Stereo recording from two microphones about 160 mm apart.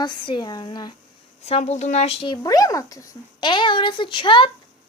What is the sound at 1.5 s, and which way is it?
Speech, 40° left (ahead or behind).